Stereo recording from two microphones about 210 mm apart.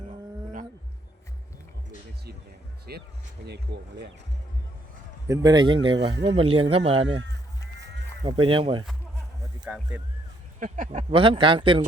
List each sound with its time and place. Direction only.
2.9 s speech: 50° right (ahead or behind)
5.3 s speech: 20° right (ahead or behind)
8.4 s speech: 25° right (ahead or behind)
9.6 s speech: 5° right (ahead or behind)
10.6 s speech: 40° right (ahead or behind)
11.1 s speech: 25° right (ahead or behind)